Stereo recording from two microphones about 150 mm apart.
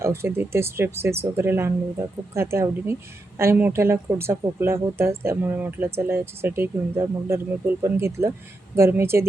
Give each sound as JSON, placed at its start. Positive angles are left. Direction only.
{"t": 0.0, "sound": "speech", "side_deg": -15}